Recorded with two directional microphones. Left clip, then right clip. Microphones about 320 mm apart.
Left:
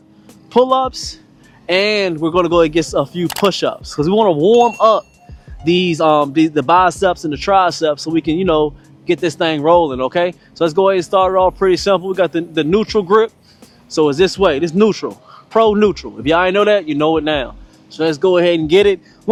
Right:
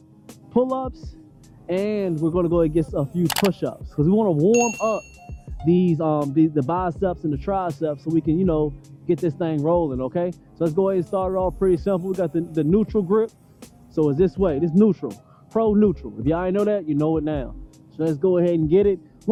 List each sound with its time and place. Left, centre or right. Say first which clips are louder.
0.7 s speech: left 12 dB; centre
4.8 s speech: left 12 dB; left
5.6 s a man's voice: left 8 dB; centre